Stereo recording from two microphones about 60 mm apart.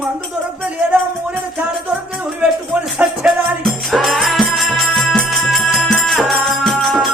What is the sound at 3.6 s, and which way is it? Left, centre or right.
Music, centre.